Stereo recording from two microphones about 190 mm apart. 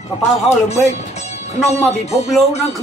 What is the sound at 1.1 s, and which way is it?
Music, 35° left (ahead or behind).